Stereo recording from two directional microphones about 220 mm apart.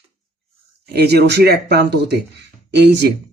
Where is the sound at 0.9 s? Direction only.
45° right (ahead or behind).